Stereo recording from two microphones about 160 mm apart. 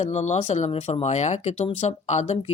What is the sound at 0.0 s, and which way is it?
Speech, 45° left (ahead or behind).